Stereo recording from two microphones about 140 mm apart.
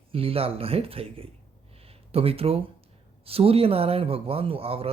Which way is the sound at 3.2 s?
45° right (ahead or behind).